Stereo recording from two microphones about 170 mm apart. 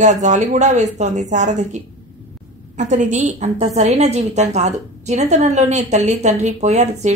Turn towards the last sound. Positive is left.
turn(degrees=-45)  # may be behind; listen again after turning